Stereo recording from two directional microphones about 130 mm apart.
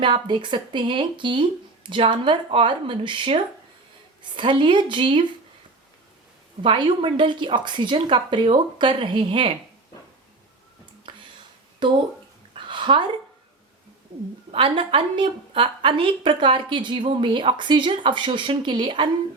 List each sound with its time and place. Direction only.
0.0 s a woman's voice: 40° right (ahead or behind)
6.6 s a woman's voice: 40° right (ahead or behind)
11.8 s speech: 35° right (ahead or behind)
12.5 s a sound: 40° right (ahead or behind)
14.5 s a woman's voice: 45° right (ahead or behind)